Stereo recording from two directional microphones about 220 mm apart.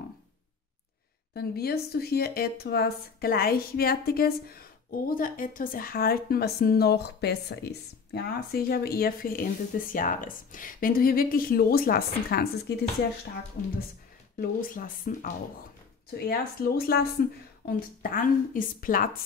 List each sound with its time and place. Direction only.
1.3 s speech: 45° left (ahead or behind)
14.7 s speech: 35° left (ahead or behind)